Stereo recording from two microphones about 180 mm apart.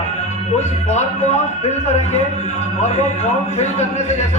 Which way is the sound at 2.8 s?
40° left (ahead or behind).